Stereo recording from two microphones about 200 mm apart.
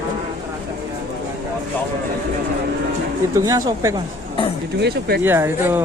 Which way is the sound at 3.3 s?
15° right (ahead or behind).